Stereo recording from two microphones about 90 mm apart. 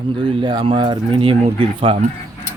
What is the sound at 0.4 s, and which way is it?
Speech, 70° right (ahead or behind).